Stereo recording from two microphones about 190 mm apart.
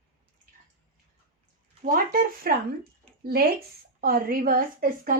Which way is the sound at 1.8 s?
40° right (ahead or behind).